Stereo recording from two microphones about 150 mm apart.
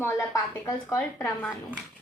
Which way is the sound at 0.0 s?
15° left (ahead or behind).